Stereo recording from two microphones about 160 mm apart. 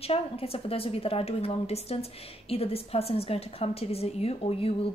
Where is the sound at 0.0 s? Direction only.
35° left (ahead or behind).